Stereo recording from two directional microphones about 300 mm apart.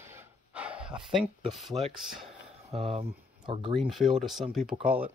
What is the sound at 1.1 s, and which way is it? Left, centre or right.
Speech, centre.